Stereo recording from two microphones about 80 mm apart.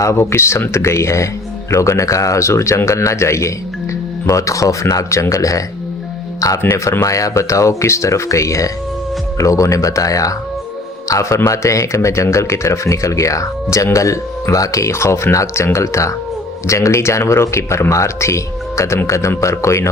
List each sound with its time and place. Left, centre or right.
0.0 s speech: left
6.6 s speech: left
7.0 s a man's voice: left